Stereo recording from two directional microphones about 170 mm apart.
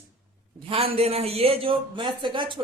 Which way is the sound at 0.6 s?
35° right (ahead or behind).